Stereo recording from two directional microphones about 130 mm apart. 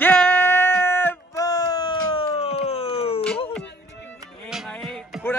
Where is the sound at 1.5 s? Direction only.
30° left (ahead or behind).